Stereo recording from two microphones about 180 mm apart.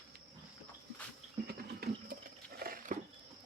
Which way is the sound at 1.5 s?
60° right (ahead or behind).